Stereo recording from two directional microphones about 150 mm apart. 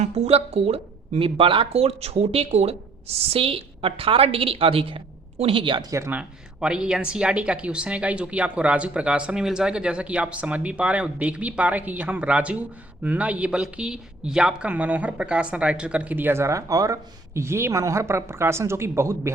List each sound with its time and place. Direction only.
0.0 s speech: 40° right (ahead or behind)
5.9 s a woman's voice: 15° right (ahead or behind)